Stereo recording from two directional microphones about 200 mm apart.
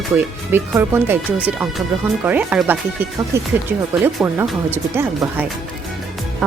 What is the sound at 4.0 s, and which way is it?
Speech, 10° right (ahead or behind).